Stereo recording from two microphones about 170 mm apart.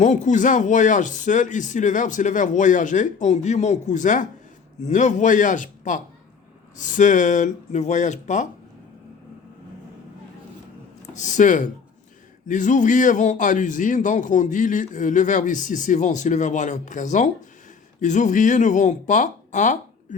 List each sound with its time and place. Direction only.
0.0 s a man's voice: 45° left (ahead or behind)
11.1 s a man's voice: 45° left (ahead or behind)